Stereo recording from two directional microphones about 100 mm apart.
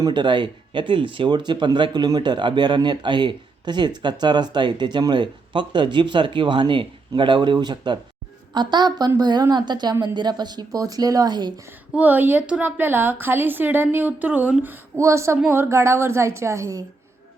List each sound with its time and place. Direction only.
0.0 s speech: 50° right (ahead or behind)
11.9 s a woman's voice: 15° right (ahead or behind)